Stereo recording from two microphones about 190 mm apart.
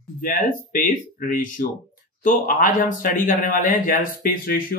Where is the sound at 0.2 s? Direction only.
45° left (ahead or behind).